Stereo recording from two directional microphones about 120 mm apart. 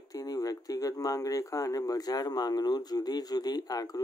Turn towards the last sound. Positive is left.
turn(degrees=30)  # may be behind; listen again after turning